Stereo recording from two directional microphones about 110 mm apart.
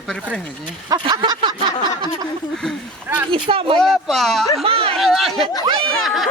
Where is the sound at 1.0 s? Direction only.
40° right (ahead or behind).